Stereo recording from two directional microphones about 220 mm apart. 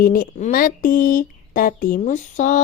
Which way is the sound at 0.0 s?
40° left (ahead or behind).